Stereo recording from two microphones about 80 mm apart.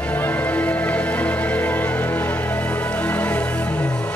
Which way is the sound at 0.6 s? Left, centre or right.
Centre.